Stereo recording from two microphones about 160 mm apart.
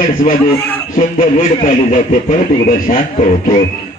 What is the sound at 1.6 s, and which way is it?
Speech, 50° left (ahead or behind).